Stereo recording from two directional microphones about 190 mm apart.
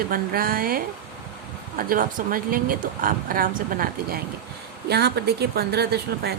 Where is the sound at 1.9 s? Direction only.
45° right (ahead or behind).